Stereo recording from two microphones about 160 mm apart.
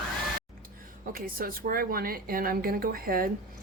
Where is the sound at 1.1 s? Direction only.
65° right (ahead or behind).